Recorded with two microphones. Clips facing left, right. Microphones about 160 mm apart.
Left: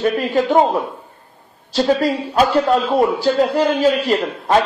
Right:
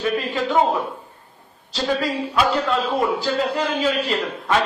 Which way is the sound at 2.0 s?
40° left (ahead or behind).